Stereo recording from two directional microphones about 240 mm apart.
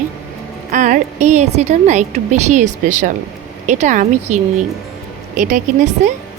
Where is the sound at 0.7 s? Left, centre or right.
Right.